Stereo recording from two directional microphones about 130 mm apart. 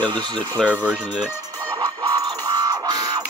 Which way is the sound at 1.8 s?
30° right (ahead or behind).